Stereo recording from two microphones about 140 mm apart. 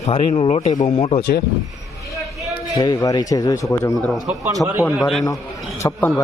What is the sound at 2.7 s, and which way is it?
Speech, 30° left (ahead or behind).